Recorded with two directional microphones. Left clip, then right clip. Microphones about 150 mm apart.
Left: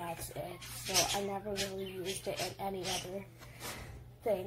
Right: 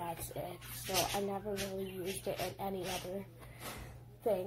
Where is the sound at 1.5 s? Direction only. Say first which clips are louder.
Left 1 dB; 15° right (ahead or behind).